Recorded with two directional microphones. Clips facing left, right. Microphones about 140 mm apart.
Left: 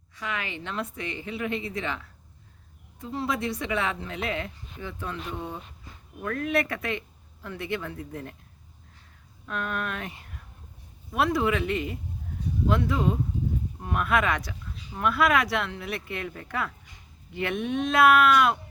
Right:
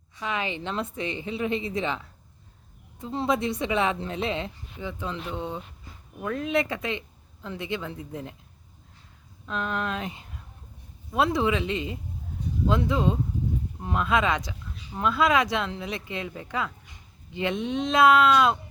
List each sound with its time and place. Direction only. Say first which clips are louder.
0.2 s a woman's voice: right 4 dB; 20° right (ahead or behind)
3.0 s a woman's voice: right 3 dB; 25° right (ahead or behind)
9.5 s a woman's voice: right 2 dB; 25° right (ahead or behind)